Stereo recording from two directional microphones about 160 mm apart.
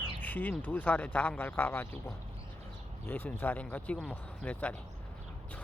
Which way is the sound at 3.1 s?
10° left (ahead or behind).